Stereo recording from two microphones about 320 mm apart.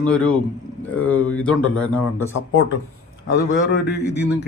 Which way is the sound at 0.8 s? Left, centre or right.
Centre.